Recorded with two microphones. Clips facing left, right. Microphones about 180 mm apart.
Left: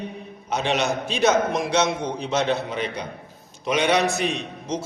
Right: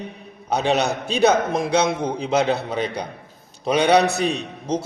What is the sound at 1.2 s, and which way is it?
A man's voice, 30° right (ahead or behind).